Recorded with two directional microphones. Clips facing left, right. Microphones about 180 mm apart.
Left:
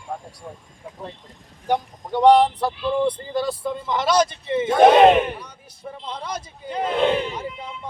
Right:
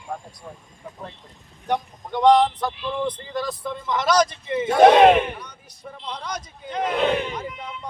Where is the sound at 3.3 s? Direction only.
30° left (ahead or behind).